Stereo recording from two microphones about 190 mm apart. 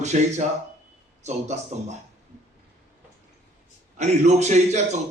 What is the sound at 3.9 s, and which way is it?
A man's voice, 35° right (ahead or behind).